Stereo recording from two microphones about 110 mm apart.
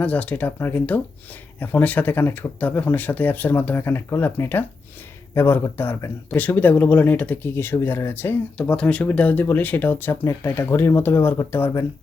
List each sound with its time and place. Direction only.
0.0 s speech: 15° left (ahead or behind)